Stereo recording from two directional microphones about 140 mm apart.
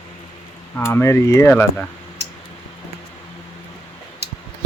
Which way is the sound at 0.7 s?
15° left (ahead or behind).